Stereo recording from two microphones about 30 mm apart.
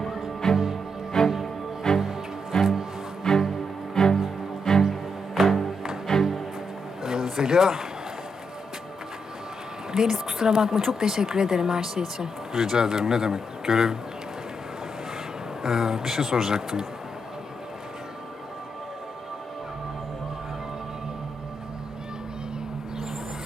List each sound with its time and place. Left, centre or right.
0.4 s music: centre
5.3 s music: centre
6.1 s music: centre
7.0 s a sound: centre
9.9 s speech: centre
15.6 s speech: centre